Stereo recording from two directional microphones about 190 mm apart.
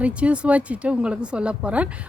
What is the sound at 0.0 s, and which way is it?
Speech, 5° right (ahead or behind).